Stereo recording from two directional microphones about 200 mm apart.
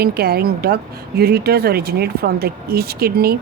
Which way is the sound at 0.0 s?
50° right (ahead or behind).